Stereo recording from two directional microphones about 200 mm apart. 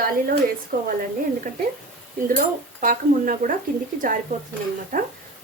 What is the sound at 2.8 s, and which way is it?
Speech, 45° right (ahead or behind).